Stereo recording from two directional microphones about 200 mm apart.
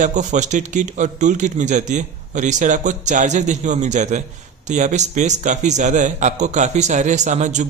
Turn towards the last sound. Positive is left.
turn(degrees=-35)  # may be behind; listen again after turning